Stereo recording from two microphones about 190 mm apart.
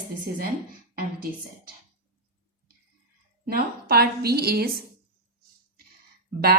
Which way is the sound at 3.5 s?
55° right (ahead or behind).